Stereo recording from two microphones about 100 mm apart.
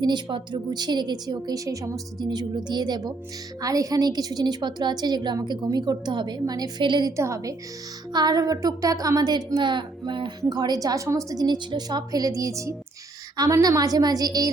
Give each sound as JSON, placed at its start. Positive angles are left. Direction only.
{"t": 0.0, "sound": "a woman's voice", "side_deg": -50}
{"t": 2.2, "sound": "a woman's voice", "side_deg": -45}
{"t": 7.2, "sound": "speech", "side_deg": -30}